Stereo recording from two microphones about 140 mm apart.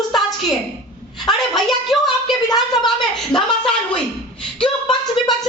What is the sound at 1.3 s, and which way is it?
Speech, centre (ahead or behind).